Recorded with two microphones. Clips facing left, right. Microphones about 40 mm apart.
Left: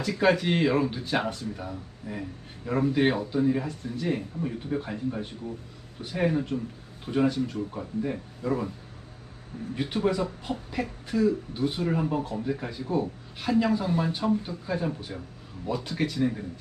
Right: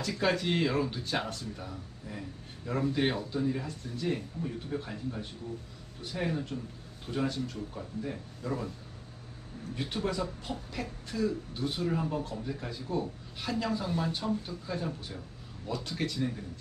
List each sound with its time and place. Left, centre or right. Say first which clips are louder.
0.0 s speech: left 6 dB; centre
9.8 s speech: left 6 dB; centre